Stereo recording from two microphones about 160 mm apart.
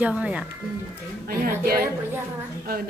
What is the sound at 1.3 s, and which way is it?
Speech, 70° right (ahead or behind).